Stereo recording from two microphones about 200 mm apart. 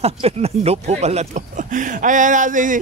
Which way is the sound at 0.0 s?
30° right (ahead or behind).